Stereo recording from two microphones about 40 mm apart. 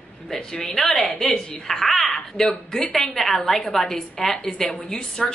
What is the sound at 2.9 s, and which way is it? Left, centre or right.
A woman's voice, centre.